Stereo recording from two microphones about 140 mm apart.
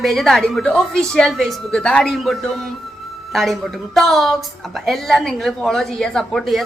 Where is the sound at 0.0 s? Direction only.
Centre (ahead or behind).